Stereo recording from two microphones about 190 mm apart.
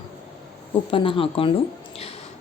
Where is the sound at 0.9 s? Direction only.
30° left (ahead or behind).